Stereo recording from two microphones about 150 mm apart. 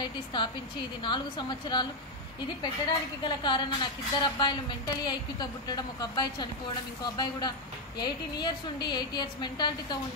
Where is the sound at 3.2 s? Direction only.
30° left (ahead or behind).